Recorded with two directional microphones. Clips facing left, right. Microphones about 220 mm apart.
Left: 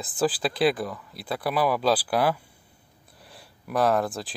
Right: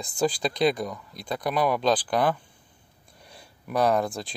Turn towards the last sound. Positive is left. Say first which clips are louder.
# even
turn(degrees=0)  # may be behind; listen again after turning